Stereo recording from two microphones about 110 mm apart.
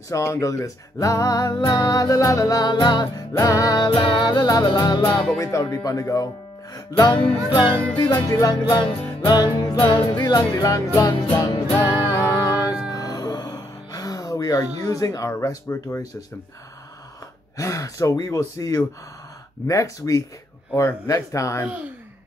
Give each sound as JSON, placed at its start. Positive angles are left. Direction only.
{"t": 0.1, "sound": "speech", "side_deg": 30}
{"t": 5.4, "sound": "speech", "side_deg": 30}
{"t": 6.7, "sound": "music", "side_deg": 35}
{"t": 7.4, "sound": "music", "side_deg": 50}
{"t": 8.1, "sound": "speech", "side_deg": 30}
{"t": 8.6, "sound": "music", "side_deg": 45}
{"t": 9.3, "sound": "speech", "side_deg": 40}
{"t": 11.9, "sound": "music", "side_deg": 30}
{"t": 17.6, "sound": "speech", "side_deg": 30}